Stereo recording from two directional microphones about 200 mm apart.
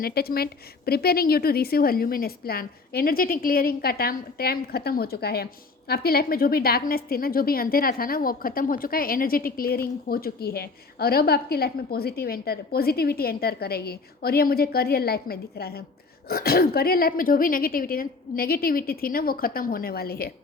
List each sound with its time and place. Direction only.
0.0 s a woman's voice: 50° left (ahead or behind)